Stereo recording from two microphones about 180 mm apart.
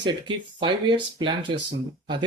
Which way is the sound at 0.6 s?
25° right (ahead or behind).